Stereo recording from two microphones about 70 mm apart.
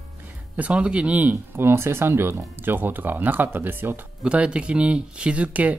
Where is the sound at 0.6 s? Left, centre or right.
Centre.